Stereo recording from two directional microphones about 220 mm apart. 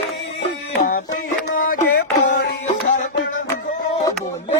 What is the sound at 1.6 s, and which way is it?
Music, 40° left (ahead or behind).